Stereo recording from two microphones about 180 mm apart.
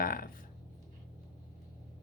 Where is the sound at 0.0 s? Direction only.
50° left (ahead or behind).